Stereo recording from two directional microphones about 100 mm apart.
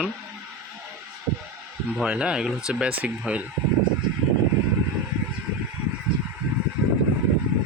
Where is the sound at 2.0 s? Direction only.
10° right (ahead or behind).